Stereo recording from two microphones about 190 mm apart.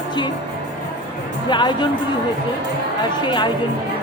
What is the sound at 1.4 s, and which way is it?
Speech, 25° left (ahead or behind).